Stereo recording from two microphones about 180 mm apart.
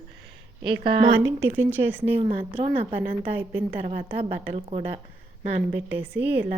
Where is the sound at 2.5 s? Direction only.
40° right (ahead or behind).